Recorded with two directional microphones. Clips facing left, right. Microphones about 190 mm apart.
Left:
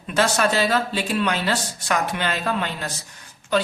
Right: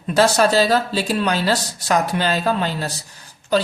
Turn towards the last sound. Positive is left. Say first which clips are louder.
# right 3 dB
turn(degrees=-35)  # may be behind; listen again after turning